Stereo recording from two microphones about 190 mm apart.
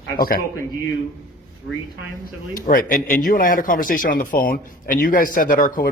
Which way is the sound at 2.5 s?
45° left (ahead or behind).